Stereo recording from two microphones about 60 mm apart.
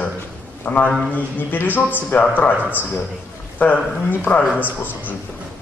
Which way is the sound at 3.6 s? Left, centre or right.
Left.